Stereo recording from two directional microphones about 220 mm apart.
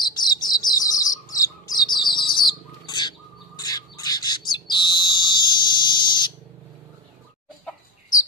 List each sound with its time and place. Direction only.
0.2 s bird: 20° left (ahead or behind)